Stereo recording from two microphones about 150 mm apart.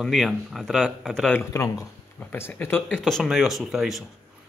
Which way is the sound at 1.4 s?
20° left (ahead or behind).